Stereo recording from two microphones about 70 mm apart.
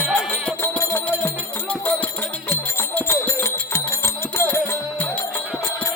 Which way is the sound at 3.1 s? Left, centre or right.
Left.